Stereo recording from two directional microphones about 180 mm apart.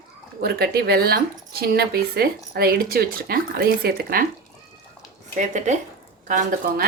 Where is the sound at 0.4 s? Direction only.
60° right (ahead or behind).